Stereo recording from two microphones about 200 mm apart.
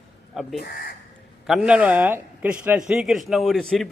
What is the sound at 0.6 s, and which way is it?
Speech, 50° left (ahead or behind).